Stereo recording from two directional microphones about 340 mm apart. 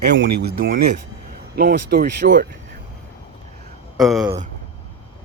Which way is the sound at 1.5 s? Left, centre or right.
Right.